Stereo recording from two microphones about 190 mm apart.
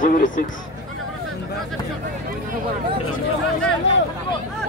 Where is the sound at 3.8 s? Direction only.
75° left (ahead or behind).